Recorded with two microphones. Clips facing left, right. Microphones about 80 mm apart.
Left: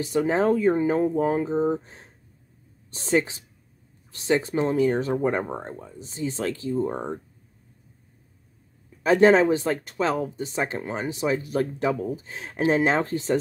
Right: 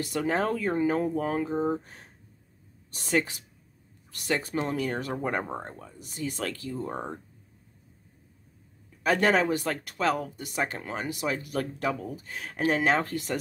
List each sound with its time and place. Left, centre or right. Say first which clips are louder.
0.0 s speech: left 5 dB; left
9.0 s speech: left 7 dB; left